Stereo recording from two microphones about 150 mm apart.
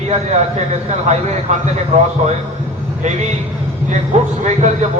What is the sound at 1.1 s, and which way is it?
A man's voice, 50° right (ahead or behind).